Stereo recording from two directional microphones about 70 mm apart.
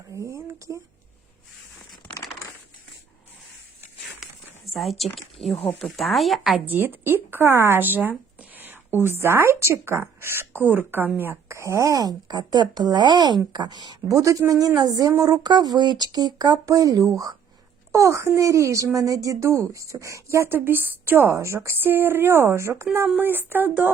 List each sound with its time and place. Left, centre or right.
0.1 s a sound: right
4.2 s a sound: centre
5.8 s speech: centre
6.7 s speech: right
11.4 s speech: right
14.1 s speech: right
15.2 s speech: right
17.9 s speech: right
20.5 s speech: right
21.2 s speech: right
23.0 s speech: right